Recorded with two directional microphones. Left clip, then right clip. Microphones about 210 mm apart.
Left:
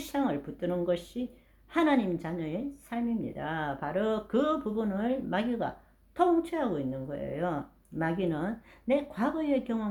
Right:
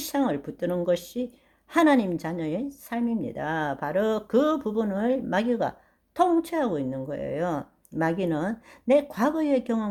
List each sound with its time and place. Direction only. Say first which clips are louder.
0.0 s a woman's voice: right 5 dB; 45° right (ahead or behind)